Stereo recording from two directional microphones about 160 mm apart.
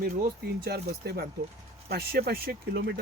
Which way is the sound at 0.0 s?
70° right (ahead or behind).